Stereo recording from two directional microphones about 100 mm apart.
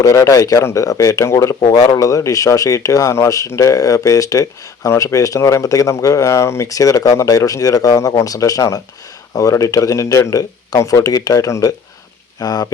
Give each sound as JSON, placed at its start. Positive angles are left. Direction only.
{"t": 0.0, "sound": "speech", "side_deg": 35}